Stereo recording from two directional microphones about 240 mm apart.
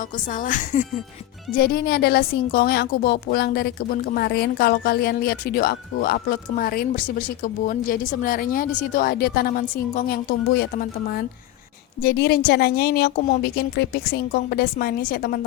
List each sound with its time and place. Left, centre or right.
0.4 s a woman's voice: left